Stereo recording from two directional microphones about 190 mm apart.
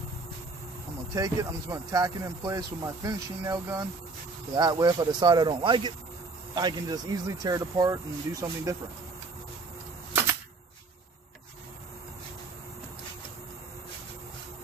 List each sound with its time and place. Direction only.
1.1 s speech: 20° right (ahead or behind)